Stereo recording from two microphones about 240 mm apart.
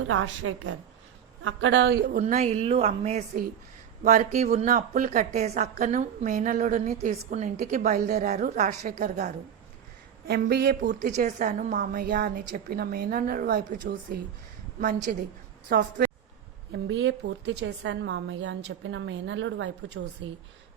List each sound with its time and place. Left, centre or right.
0.1 s a woman's voice: right
2.1 s a woman's voice: right